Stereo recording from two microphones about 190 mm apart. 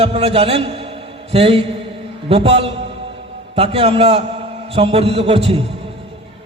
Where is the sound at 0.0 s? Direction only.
30° right (ahead or behind).